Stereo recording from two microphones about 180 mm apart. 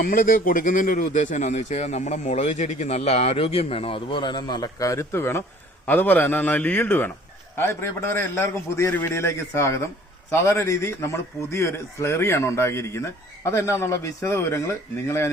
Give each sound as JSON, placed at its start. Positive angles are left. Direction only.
{"t": 0.0, "sound": "a man's voice", "side_deg": 55}